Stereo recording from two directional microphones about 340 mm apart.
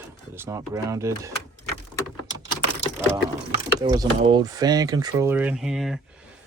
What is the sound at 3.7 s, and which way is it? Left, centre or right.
Speech, centre.